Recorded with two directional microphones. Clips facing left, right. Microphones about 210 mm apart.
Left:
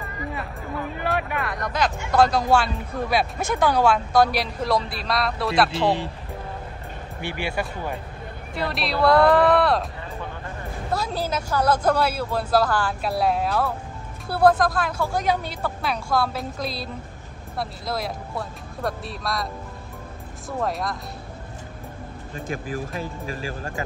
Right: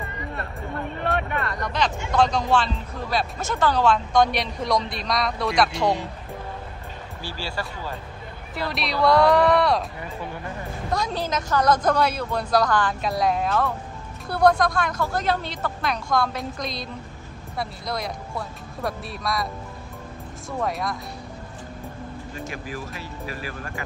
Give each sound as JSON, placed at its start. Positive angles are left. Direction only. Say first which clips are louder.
{"t": 0.3, "sound": "speech", "louder": "even", "side_deg": 5}
{"t": 5.8, "sound": "speech", "louder": "left 1 dB", "side_deg": 30}
{"t": 7.2, "sound": "speech", "louder": "left 5 dB", "side_deg": 20}
{"t": 8.5, "sound": "speech", "louder": "left 1 dB", "side_deg": 0}
{"t": 10.9, "sound": "speech", "louder": "even", "side_deg": 5}